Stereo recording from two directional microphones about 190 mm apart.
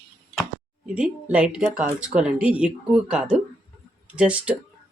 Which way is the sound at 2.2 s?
5° right (ahead or behind).